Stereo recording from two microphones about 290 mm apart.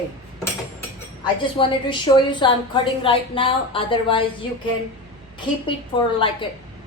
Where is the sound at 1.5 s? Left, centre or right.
Centre.